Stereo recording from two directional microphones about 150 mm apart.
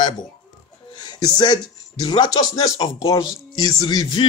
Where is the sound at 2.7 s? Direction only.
35° left (ahead or behind).